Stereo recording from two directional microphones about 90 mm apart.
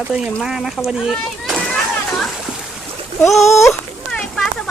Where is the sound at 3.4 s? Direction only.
30° left (ahead or behind).